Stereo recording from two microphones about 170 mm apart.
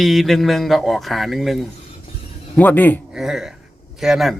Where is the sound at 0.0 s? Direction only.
Centre (ahead or behind).